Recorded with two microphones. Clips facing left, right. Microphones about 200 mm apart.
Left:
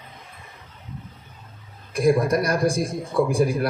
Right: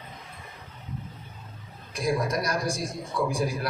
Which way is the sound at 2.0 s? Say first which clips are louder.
Left 8 dB; 55° left (ahead or behind).